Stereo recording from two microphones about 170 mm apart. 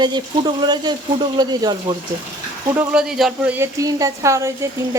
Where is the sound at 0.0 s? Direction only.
25° right (ahead or behind).